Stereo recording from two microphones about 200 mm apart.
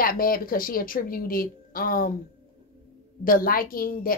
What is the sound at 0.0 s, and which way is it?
A woman's voice, 45° left (ahead or behind).